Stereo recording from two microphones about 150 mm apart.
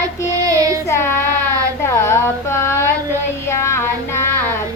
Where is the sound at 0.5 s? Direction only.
20° right (ahead or behind).